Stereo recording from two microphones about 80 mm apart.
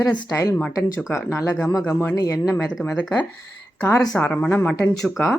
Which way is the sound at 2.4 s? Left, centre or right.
Left.